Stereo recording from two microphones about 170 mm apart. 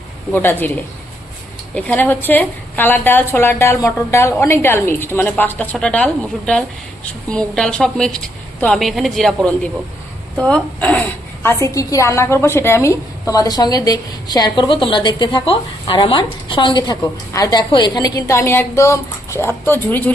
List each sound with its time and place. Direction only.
0.3 s a woman's voice: 10° left (ahead or behind)
1.7 s a woman's voice: 10° left (ahead or behind)
11.4 s a woman's voice: 15° left (ahead or behind)